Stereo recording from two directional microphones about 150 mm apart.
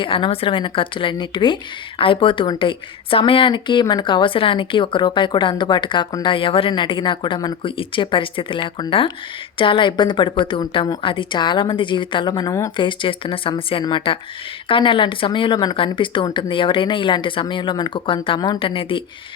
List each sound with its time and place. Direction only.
0.0 s a woman's voice: 35° left (ahead or behind)
12.8 s a woman's voice: 35° left (ahead or behind)